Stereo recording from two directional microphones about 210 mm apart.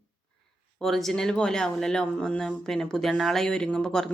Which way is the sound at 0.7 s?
Centre (ahead or behind).